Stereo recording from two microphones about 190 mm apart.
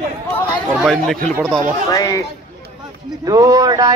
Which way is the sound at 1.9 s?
15° left (ahead or behind).